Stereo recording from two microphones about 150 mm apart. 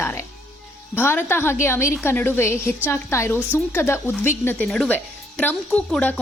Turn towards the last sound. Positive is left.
turn(degrees=10)  # may be behind; listen again after turning